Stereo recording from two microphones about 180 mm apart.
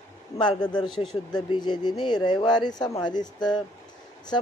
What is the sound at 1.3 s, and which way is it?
Speech, 25° left (ahead or behind).